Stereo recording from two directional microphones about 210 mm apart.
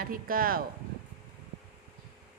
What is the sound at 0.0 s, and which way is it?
Speech, 45° right (ahead or behind).